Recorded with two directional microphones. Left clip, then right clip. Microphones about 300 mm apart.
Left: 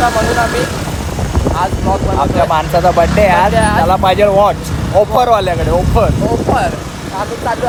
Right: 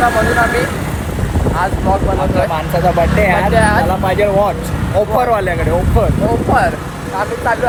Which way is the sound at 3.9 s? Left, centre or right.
Centre.